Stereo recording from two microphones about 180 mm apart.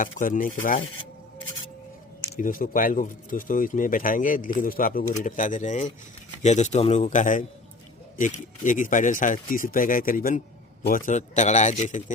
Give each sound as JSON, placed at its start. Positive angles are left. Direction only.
{"t": 0.0, "sound": "speech", "side_deg": 50}
{"t": 2.3, "sound": "speech", "side_deg": 50}